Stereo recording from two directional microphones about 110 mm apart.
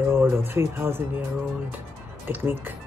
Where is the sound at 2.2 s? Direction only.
20° right (ahead or behind).